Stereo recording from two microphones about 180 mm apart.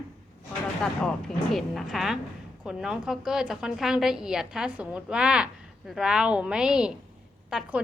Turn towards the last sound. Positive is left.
turn(degrees=-5)  # may be behind; listen again after turning